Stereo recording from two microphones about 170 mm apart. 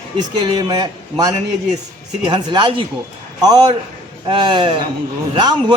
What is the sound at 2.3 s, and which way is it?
A man's voice, 25° right (ahead or behind).